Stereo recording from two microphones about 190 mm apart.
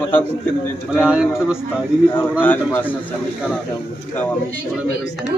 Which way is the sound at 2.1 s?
10° left (ahead or behind).